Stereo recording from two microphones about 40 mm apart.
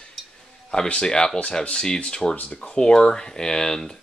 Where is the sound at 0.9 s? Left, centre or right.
Left.